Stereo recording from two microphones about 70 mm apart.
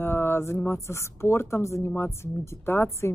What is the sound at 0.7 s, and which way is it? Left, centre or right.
Speech, left.